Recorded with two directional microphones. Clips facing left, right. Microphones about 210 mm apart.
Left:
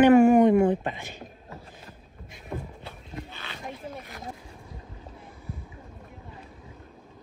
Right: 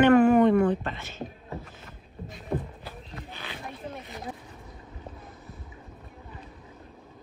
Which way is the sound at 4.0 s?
Centre (ahead or behind).